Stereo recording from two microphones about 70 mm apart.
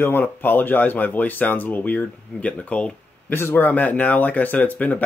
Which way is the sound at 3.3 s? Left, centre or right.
Left.